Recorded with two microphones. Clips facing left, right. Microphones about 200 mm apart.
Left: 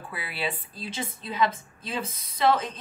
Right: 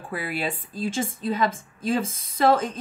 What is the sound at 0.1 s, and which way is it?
A woman's voice, 45° right (ahead or behind).